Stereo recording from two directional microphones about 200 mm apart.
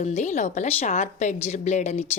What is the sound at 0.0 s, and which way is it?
Speech, 35° left (ahead or behind).